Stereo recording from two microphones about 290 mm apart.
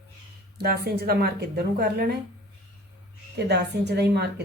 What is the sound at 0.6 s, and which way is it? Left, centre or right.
A woman's voice, right.